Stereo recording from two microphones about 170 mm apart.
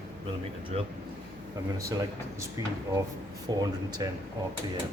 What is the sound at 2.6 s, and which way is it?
Speech, 20° right (ahead or behind).